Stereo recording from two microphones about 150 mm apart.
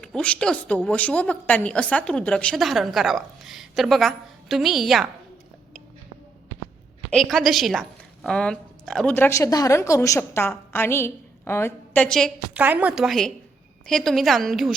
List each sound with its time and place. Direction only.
0.0 s a woman's voice: 5° left (ahead or behind)
7.1 s a woman's voice: centre (ahead or behind)
12.0 s a woman's voice: 5° left (ahead or behind)
12.5 s a woman's voice: 10° right (ahead or behind)